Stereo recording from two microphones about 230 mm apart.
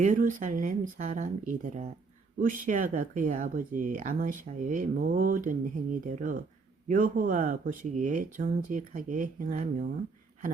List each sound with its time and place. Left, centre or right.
0.0 s speech: right